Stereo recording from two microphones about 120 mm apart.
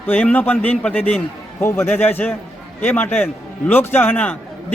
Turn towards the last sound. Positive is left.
turn(degrees=15)  # may be behind; listen again after turning